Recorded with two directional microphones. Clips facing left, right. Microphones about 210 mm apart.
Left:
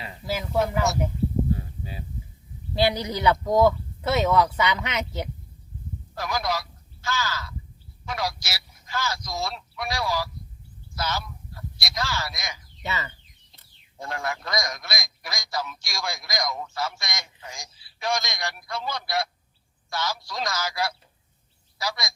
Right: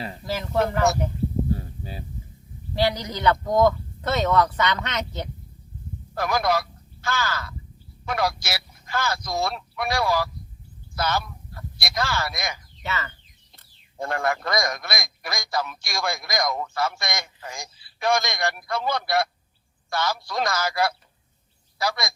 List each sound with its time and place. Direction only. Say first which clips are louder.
0.3 s speech: even; 10° left (ahead or behind)
1.5 s a sound: right 1 dB; 35° right (ahead or behind)
2.8 s speech: even; 10° left (ahead or behind)
6.1 s speech: right 5 dB; 55° right (ahead or behind)
12.8 s speech: right 1 dB; 15° left (ahead or behind)
14.0 s a man's voice: right 6 dB; 55° right (ahead or behind)